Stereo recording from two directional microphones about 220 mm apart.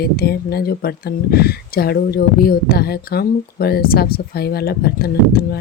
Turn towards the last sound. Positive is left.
turn(degrees=45)  # may be behind; listen again after turning